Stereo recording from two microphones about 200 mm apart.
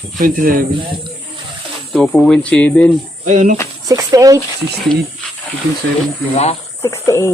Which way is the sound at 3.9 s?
15° right (ahead or behind).